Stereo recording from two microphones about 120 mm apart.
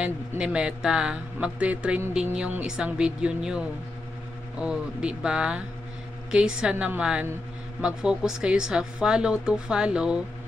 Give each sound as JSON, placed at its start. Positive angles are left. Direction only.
{"t": 0.4, "sound": "speech", "side_deg": -5}